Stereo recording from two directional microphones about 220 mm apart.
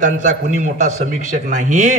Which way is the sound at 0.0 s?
35° right (ahead or behind).